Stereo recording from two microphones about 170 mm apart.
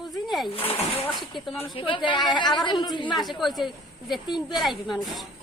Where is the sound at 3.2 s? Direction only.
Centre (ahead or behind).